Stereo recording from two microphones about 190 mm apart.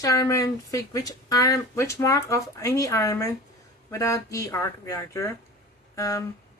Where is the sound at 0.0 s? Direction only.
20° left (ahead or behind).